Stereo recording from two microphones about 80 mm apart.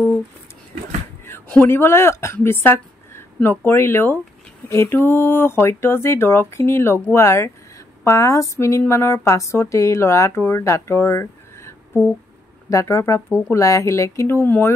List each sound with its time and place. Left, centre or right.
1.7 s speech: left